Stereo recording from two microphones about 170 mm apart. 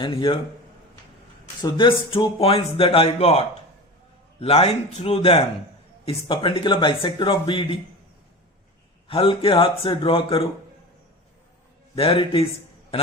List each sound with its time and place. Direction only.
0.0 s a man's voice: 30° left (ahead or behind)
1.6 s a man's voice: 30° left (ahead or behind)
9.0 s speech: 30° left (ahead or behind)
11.9 s speech: 35° left (ahead or behind)